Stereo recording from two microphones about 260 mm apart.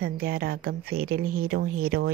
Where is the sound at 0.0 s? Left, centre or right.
Right.